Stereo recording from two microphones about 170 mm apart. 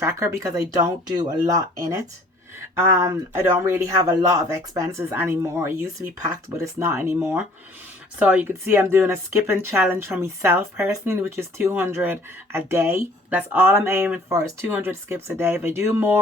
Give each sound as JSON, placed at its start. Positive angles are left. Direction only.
{"t": 0.0, "sound": "speech", "side_deg": -15}